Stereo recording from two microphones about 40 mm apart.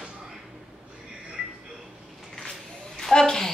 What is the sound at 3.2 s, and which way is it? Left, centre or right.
Speech, centre.